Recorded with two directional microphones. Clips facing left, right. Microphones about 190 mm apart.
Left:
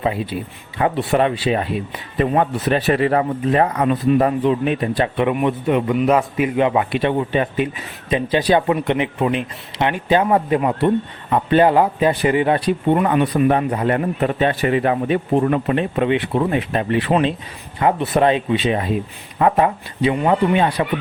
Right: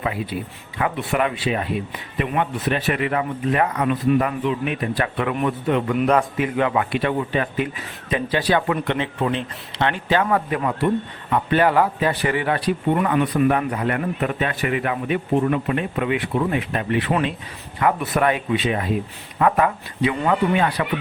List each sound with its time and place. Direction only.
0.0 s speech: 30° left (ahead or behind)